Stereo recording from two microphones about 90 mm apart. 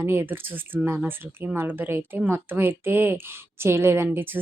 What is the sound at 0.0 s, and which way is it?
A woman's voice, 25° right (ahead or behind).